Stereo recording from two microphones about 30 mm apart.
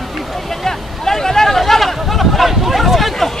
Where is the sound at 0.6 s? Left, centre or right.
Centre.